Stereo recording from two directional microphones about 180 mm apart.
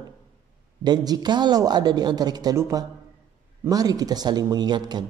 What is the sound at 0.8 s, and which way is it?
A woman's voice, 20° right (ahead or behind).